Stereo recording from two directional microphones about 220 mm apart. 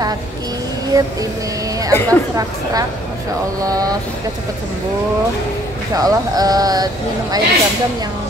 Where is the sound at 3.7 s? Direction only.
15° right (ahead or behind).